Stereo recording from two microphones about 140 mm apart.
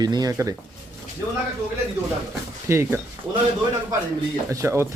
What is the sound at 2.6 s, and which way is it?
Speech, 15° right (ahead or behind).